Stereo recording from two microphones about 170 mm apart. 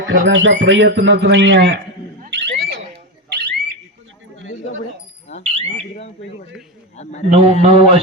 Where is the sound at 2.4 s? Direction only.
75° right (ahead or behind).